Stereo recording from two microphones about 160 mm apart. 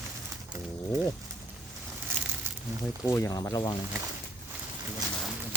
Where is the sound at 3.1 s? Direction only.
15° left (ahead or behind).